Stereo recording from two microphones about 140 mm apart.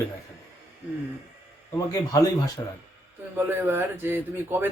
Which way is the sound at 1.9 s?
25° left (ahead or behind).